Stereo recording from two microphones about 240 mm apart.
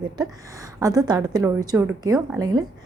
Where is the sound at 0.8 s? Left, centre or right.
Centre.